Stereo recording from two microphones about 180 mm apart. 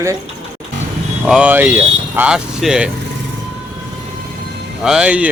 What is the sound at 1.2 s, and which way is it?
Speech, 5° right (ahead or behind).